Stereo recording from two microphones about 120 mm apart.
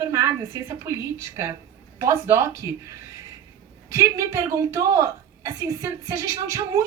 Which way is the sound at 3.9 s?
25° right (ahead or behind).